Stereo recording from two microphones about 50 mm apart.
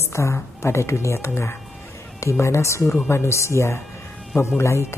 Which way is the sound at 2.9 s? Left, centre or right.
Left.